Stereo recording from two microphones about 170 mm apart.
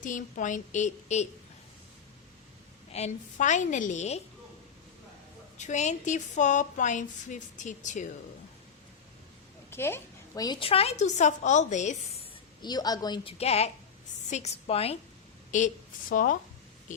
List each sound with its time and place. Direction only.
0.0 s a woman's voice: 50° left (ahead or behind)
2.9 s a woman's voice: 45° left (ahead or behind)
5.5 s a woman's voice: 45° left (ahead or behind)
9.6 s a woman's voice: 15° left (ahead or behind); by 12.2 s 45° left (ahead or behind)
12.6 s a woman's voice: 25° left (ahead or behind)
13.4 s a woman's voice: 40° left (ahead or behind)
15.5 s a woman's voice: 50° left (ahead or behind)